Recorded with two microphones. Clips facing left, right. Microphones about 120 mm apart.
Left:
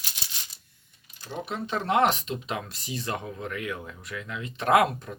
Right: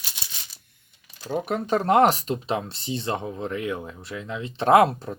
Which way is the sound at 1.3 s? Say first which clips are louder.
Right 7 dB; 45° right (ahead or behind).